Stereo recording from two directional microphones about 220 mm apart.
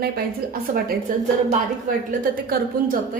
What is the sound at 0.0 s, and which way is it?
Speech, 45° right (ahead or behind).